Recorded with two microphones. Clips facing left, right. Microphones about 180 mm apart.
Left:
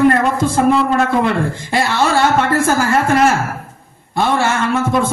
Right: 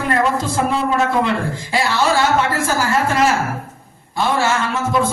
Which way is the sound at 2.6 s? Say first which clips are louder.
Left 4 dB; 55° left (ahead or behind).